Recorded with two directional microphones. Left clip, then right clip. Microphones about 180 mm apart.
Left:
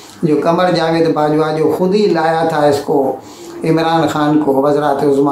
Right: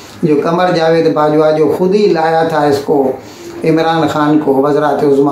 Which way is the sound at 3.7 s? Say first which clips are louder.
Right 1 dB; 10° left (ahead or behind).